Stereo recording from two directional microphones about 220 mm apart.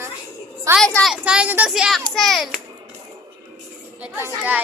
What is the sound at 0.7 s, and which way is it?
A child's voice, centre (ahead or behind).